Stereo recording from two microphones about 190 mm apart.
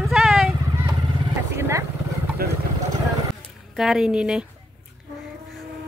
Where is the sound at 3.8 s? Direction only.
Centre (ahead or behind).